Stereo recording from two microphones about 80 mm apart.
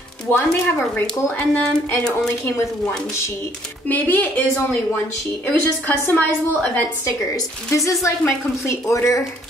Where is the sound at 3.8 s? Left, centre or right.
Left.